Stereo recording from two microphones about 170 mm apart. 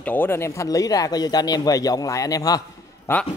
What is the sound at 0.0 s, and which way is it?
Speech, 10° left (ahead or behind).